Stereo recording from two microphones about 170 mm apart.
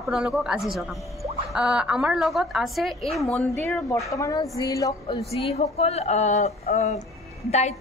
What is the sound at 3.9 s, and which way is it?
Speech, 20° left (ahead or behind).